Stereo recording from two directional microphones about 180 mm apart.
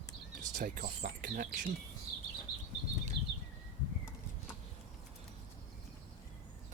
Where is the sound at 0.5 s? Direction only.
45° right (ahead or behind).